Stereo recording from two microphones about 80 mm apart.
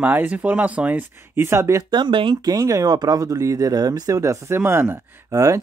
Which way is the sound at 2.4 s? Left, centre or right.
Right.